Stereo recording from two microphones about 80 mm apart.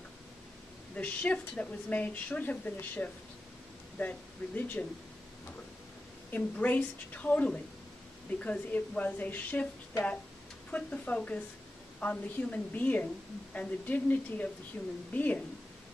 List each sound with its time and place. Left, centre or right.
0.9 s a woman's voice: centre
6.3 s a woman's voice: centre
10.7 s a woman's voice: centre